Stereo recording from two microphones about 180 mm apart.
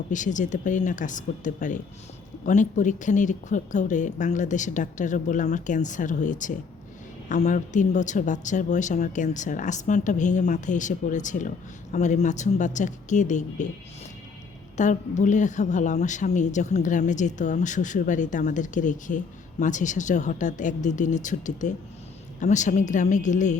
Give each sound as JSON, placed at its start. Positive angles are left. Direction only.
{"t": 0.1, "sound": "a woman's voice", "side_deg": 45}
{"t": 14.8, "sound": "a woman's voice", "side_deg": 40}